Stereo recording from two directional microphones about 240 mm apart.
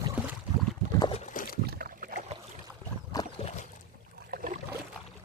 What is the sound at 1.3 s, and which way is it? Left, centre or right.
Rowboat, left.